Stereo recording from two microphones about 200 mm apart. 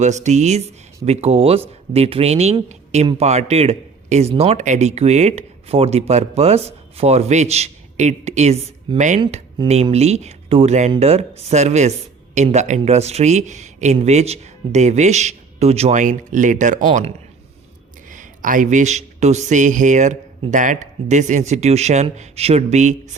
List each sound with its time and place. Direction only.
0.0 s speech: 35° right (ahead or behind)